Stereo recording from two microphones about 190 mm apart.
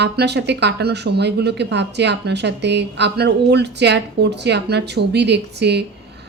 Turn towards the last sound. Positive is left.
turn(degrees=-60)  # may be behind; listen again after turning